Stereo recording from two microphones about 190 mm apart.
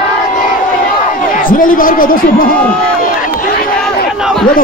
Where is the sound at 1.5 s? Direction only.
45° left (ahead or behind).